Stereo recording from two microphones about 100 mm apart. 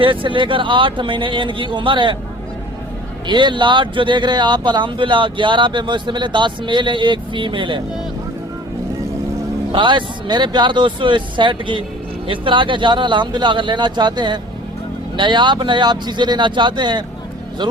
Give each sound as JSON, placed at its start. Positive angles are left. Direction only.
{"t": 0.0, "sound": "speech", "side_deg": -60}
{"t": 3.2, "sound": "speech", "side_deg": -50}
{"t": 9.7, "sound": "speech", "side_deg": -50}